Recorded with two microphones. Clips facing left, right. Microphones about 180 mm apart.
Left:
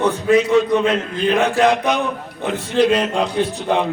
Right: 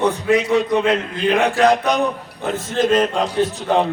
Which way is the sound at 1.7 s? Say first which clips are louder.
Right 1 dB; 40° right (ahead or behind).